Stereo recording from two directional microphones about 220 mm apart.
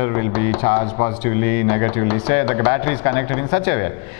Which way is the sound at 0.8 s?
30° left (ahead or behind).